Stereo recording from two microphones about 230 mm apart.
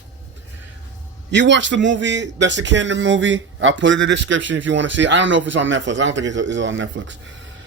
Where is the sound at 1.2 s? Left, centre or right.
Right.